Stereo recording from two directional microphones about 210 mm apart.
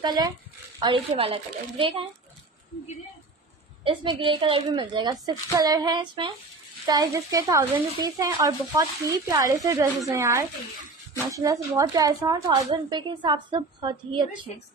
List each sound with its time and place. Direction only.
0.0 s a woman's voice: 20° right (ahead or behind)
3.8 s a woman's voice: 25° right (ahead or behind)